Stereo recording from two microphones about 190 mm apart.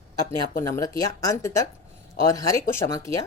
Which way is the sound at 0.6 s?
15° left (ahead or behind).